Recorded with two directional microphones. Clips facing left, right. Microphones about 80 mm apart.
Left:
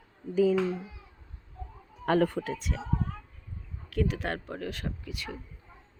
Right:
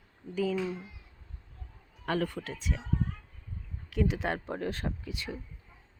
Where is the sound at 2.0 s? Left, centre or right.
Left.